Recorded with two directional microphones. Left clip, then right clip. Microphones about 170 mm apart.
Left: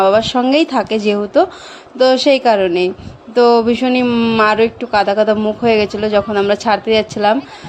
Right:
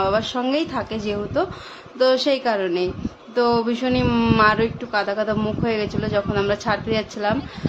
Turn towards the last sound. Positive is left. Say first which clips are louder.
# left 10 dB
turn(degrees=35)  # may be behind; listen again after turning